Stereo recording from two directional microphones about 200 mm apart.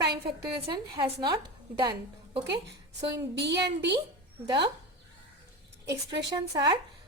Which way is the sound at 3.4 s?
55° right (ahead or behind).